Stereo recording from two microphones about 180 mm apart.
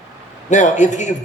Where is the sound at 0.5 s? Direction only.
45° left (ahead or behind).